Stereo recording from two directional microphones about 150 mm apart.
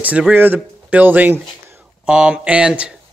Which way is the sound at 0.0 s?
10° right (ahead or behind).